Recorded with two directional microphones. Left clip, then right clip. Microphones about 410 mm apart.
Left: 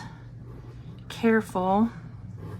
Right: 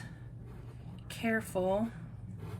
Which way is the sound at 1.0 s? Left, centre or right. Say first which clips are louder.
Left 10 dB; centre.